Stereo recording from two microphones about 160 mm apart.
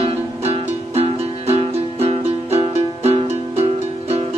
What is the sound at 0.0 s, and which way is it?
Music, 40° right (ahead or behind).